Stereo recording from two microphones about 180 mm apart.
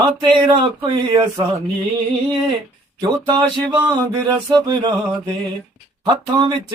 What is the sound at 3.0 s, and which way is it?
A man's voice, 25° right (ahead or behind).